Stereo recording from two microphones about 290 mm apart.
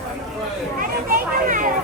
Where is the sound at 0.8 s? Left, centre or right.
Right.